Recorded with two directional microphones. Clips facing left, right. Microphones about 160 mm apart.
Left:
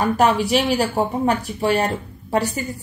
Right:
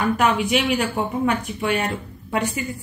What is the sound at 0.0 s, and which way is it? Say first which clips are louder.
A woman's voice: left 2 dB; 35° left (ahead or behind).